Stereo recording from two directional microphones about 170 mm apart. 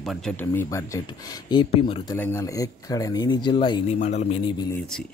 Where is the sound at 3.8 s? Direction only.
45° left (ahead or behind).